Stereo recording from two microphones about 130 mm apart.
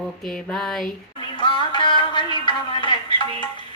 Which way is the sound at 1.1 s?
40° left (ahead or behind).